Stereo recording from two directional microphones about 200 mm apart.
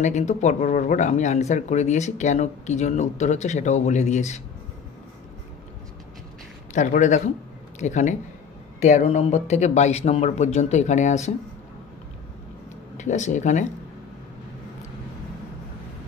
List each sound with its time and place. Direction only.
0.0 s speech: 35° left (ahead or behind)
6.7 s speech: 40° left (ahead or behind)
12.9 s speech: 35° left (ahead or behind)